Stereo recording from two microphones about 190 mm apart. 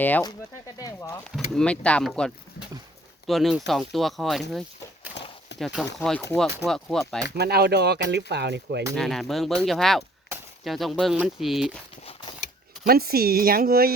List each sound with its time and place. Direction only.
0.0 s speech: 10° left (ahead or behind)
1.3 s speech: 5° left (ahead or behind)
5.2 s clip-clop: 65° left (ahead or behind)
5.5 s speech: centre (ahead or behind)
7.3 s speech: 60° right (ahead or behind)
9.0 s speech: centre (ahead or behind)
12.8 s speech: 55° right (ahead or behind)